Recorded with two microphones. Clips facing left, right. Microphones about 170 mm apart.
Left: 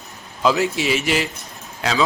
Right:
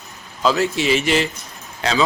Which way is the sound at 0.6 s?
Centre (ahead or behind).